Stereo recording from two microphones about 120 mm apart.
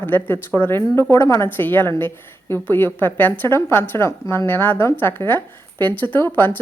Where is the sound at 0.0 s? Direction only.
15° left (ahead or behind).